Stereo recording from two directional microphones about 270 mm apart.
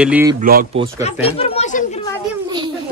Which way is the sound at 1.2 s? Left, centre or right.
Left.